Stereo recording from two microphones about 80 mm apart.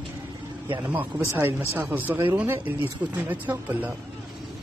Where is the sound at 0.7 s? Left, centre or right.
Right.